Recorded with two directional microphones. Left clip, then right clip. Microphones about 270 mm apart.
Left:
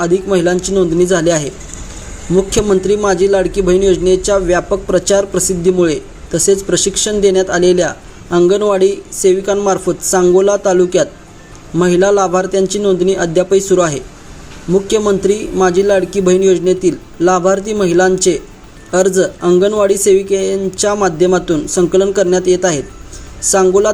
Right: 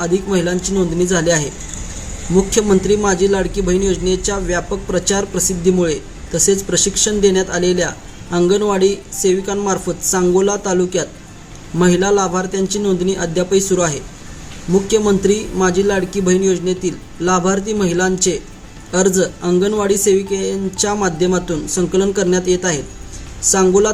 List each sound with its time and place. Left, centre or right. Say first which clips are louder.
0.0 s a man's voice: left 5 dB; centre